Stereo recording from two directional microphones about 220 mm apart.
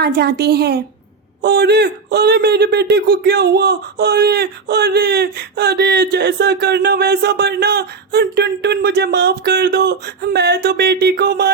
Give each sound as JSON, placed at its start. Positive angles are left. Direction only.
{"t": 0.0, "sound": "a man's voice", "side_deg": -45}